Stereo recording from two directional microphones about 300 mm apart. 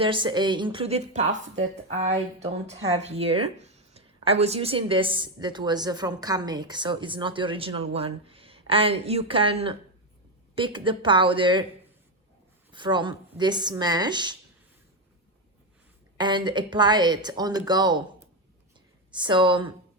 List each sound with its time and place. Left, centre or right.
0.0 s speech: centre
12.7 s speech: centre
16.1 s speech: centre
19.1 s speech: centre